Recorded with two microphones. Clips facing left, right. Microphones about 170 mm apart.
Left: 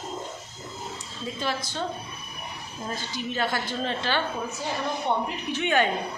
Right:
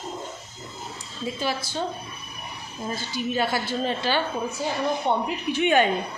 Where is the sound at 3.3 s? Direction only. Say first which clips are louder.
Right 2 dB; 10° right (ahead or behind).